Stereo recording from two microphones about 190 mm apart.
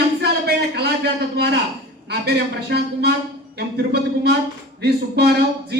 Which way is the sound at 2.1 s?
60° right (ahead or behind).